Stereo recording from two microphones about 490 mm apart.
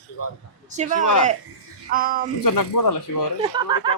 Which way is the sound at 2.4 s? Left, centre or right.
Left.